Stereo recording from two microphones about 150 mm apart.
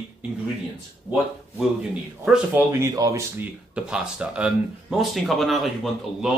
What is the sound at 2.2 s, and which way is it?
Speech, 5° right (ahead or behind).